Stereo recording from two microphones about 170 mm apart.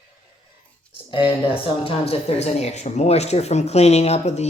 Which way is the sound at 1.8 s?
35° left (ahead or behind).